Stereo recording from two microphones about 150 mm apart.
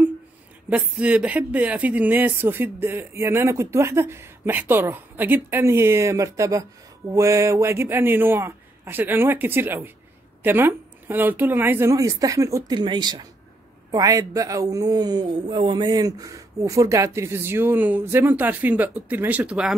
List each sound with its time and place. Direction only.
0.7 s speech: 10° right (ahead or behind)